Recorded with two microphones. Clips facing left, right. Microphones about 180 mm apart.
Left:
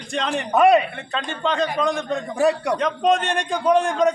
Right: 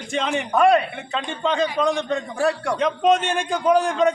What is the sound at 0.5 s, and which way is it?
Speech, 20° left (ahead or behind).